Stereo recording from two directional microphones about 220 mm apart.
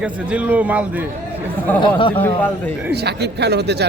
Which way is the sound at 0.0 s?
5° right (ahead or behind).